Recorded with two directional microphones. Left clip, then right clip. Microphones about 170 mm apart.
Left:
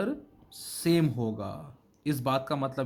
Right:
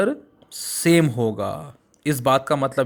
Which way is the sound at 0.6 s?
35° right (ahead or behind).